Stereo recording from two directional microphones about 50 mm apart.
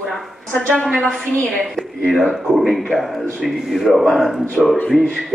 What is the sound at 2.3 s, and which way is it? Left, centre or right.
Speech, centre.